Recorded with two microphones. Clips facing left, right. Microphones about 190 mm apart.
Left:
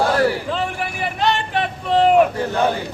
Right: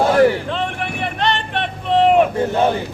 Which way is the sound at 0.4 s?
5° left (ahead or behind).